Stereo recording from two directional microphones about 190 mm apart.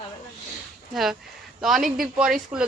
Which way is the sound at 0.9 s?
Centre (ahead or behind).